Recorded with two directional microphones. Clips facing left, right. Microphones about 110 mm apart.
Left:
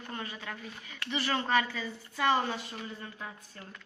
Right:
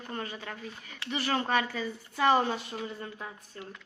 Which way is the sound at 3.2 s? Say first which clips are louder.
Right 2 dB; 15° right (ahead or behind).